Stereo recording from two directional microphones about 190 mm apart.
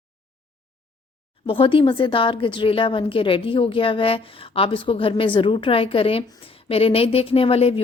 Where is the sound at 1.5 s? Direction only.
30° left (ahead or behind).